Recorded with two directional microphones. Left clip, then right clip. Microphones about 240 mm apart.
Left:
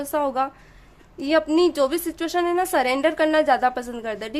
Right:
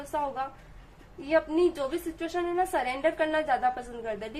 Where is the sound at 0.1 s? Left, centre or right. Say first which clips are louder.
Left 8 dB; left.